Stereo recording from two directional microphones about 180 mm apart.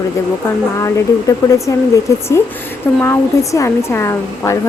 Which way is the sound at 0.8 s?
15° left (ahead or behind).